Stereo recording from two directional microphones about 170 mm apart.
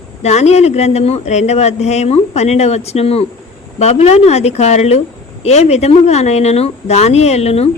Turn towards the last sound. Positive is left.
turn(degrees=40)  # may be behind; listen again after turning